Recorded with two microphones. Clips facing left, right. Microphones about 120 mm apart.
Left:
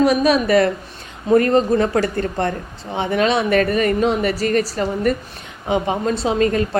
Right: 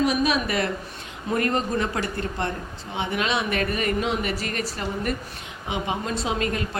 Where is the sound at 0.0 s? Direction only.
40° left (ahead or behind).